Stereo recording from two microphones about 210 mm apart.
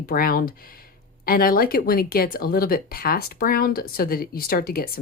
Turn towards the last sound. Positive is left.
turn(degrees=45)  # may be behind; listen again after turning